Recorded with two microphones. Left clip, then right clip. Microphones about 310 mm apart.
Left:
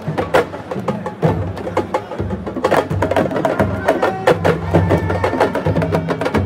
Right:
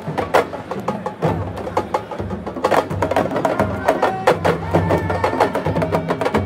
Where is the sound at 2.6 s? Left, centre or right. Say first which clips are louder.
Left 1 dB; right.